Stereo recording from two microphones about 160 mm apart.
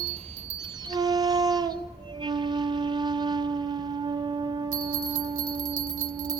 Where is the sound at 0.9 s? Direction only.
25° right (ahead or behind).